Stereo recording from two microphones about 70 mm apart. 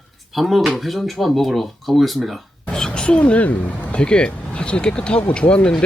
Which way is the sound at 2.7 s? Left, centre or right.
Centre.